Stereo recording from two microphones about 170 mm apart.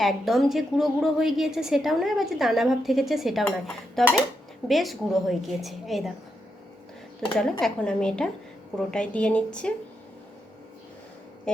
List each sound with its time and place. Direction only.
0.0 s a woman's voice: centre (ahead or behind)
7.3 s a woman's voice: 5° left (ahead or behind)
11.5 s a woman's voice: 5° left (ahead or behind)